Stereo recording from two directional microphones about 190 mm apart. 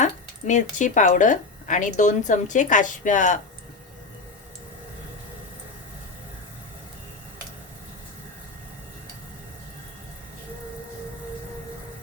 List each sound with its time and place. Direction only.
0.0 s speech: 40° left (ahead or behind)